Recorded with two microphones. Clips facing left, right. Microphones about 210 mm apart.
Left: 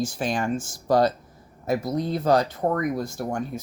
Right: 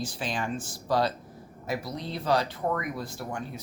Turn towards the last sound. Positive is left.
turn(degrees=45)  # may be behind; listen again after turning